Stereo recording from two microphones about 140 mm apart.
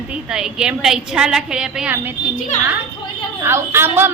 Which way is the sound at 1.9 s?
15° right (ahead or behind).